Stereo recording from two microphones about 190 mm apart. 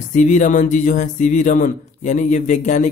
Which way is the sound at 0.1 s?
40° left (ahead or behind).